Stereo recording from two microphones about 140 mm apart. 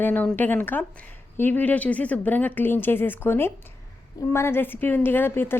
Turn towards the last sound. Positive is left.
turn(degrees=15)  # may be behind; listen again after turning